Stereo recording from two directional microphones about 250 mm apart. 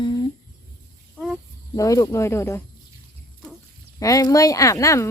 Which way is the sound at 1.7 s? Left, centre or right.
Centre.